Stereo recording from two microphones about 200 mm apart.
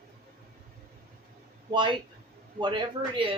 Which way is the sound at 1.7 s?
25° right (ahead or behind).